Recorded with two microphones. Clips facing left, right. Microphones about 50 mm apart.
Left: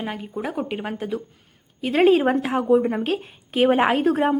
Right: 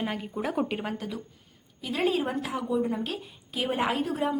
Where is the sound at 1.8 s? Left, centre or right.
Left.